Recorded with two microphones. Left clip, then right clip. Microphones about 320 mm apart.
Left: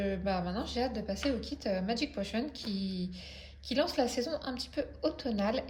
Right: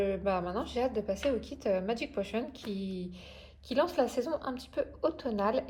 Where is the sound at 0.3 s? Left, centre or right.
Centre.